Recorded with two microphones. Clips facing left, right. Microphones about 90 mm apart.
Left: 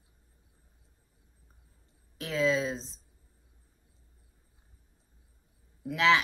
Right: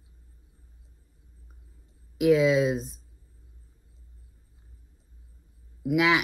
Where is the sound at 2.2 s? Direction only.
15° right (ahead or behind).